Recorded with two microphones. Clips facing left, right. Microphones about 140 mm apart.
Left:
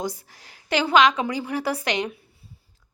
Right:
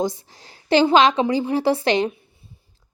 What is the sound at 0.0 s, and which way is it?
A woman's voice, 25° right (ahead or behind).